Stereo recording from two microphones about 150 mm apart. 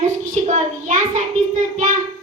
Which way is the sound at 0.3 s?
50° right (ahead or behind).